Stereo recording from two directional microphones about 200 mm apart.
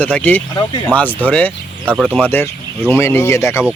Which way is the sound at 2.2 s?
10° left (ahead or behind).